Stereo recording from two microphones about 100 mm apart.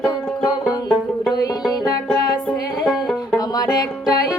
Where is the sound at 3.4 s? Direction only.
40° left (ahead or behind).